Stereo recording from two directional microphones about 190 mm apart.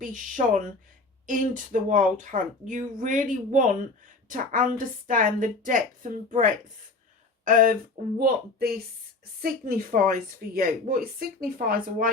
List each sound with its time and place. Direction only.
0.0 s a woman's voice: 45° right (ahead or behind)